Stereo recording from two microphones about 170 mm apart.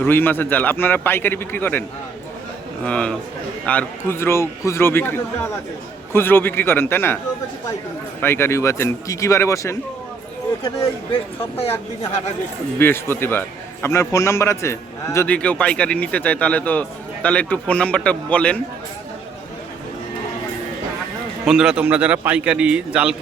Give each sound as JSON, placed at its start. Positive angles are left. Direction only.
{"t": 0.0, "sound": "a man's voice", "side_deg": 10}
{"t": 2.8, "sound": "a man's voice", "side_deg": 5}
{"t": 8.2, "sound": "a man's voice", "side_deg": 15}
{"t": 11.1, "sound": "speech", "side_deg": 35}
{"t": 12.8, "sound": "a man's voice", "side_deg": 15}
{"t": 21.4, "sound": "a man's voice", "side_deg": -5}